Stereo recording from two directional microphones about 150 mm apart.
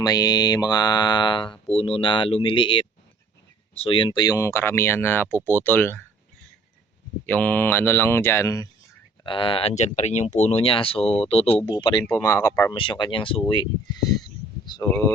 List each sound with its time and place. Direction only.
0.0 s mantra: 25° left (ahead or behind)
1.7 s speech: 40° left (ahead or behind); by 6.0 s 15° left (ahead or behind)
7.3 s speech: 10° left (ahead or behind)
9.2 s speech: 35° left (ahead or behind)
12.0 s speech: 15° left (ahead or behind)
12.7 s speech: 35° left (ahead or behind)
14.7 s mantra: 20° left (ahead or behind)